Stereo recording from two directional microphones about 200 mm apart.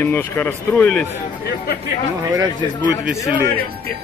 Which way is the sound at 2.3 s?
15° right (ahead or behind).